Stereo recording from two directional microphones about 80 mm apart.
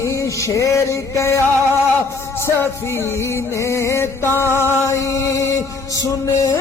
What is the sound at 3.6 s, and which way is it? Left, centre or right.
Music, left.